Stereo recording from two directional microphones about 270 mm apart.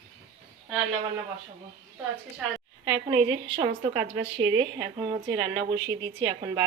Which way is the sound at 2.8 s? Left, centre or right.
Centre.